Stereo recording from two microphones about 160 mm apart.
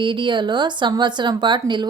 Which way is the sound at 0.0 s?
30° right (ahead or behind).